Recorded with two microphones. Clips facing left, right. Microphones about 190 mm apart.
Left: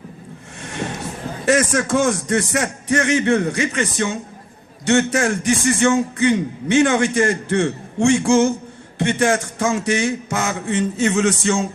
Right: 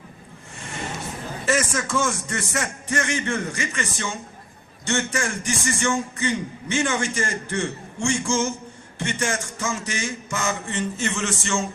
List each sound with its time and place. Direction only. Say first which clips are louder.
1.5 s a man's voice: left 7 dB; 65° left (ahead or behind)